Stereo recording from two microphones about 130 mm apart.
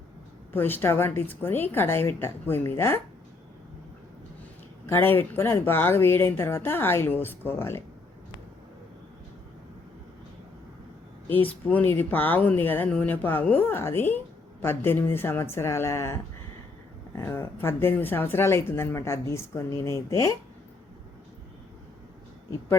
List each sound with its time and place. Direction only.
0.5 s speech: 15° left (ahead or behind)
4.9 s speech: 15° left (ahead or behind)
11.3 s speech: 15° left (ahead or behind)